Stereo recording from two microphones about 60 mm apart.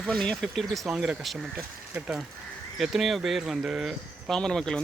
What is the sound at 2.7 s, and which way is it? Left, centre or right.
Speech, centre.